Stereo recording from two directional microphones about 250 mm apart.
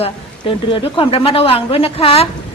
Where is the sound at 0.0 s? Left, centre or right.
Left.